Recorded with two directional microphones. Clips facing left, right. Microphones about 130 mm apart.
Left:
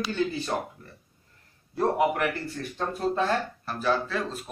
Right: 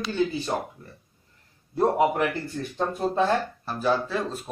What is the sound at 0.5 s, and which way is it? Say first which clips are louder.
Speech: right 1 dB; 10° right (ahead or behind).